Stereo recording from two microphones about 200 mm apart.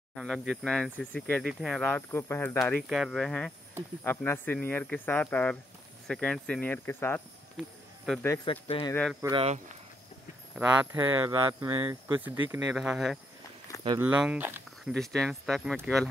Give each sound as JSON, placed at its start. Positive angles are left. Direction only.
{"t": 0.1, "sound": "speech", "side_deg": 0}
{"t": 7.5, "sound": "cricket", "side_deg": 0}
{"t": 8.5, "sound": "speech", "side_deg": 25}
{"t": 9.2, "sound": "speech", "side_deg": -25}
{"t": 10.5, "sound": "speech", "side_deg": -10}
{"t": 12.5, "sound": "speech", "side_deg": -5}